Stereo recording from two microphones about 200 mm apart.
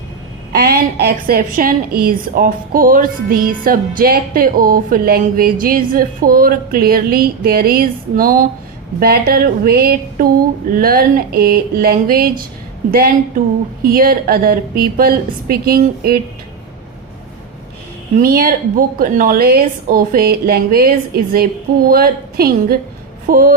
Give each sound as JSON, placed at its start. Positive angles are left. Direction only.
{"t": 0.5, "sound": "a woman's voice", "side_deg": -50}
{"t": 18.2, "sound": "a woman's voice", "side_deg": -45}